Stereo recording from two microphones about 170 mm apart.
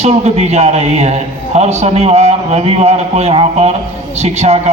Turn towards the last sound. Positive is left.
turn(degrees=-40)  # may be behind; listen again after turning